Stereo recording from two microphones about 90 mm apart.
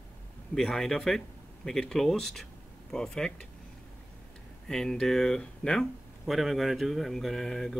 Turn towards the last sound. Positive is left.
turn(degrees=5)  # may be behind; listen again after turning